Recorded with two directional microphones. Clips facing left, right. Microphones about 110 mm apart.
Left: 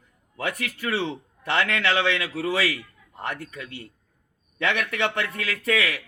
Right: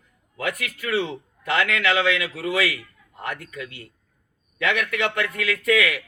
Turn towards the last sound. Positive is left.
turn(degrees=30)  # may be behind; listen again after turning